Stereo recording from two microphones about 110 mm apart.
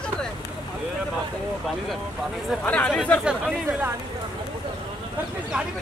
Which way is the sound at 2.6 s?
10° left (ahead or behind).